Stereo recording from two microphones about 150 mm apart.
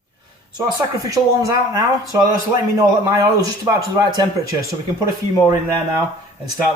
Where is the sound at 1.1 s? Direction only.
25° right (ahead or behind).